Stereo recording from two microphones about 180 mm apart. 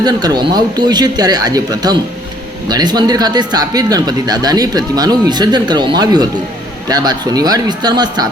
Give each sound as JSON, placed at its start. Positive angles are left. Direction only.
{"t": 0.0, "sound": "speech", "side_deg": -20}